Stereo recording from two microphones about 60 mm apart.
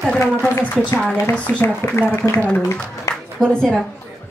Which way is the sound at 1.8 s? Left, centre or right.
Left.